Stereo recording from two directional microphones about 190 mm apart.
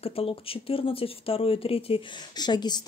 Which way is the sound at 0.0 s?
30° left (ahead or behind).